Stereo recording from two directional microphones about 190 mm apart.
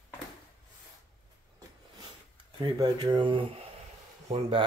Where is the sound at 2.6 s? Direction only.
20° right (ahead or behind).